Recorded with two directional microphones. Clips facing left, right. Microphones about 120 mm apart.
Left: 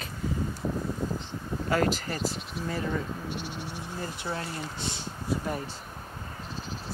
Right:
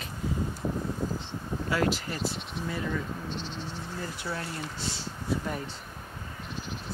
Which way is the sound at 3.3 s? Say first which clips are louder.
Left 1 dB; 10° left (ahead or behind).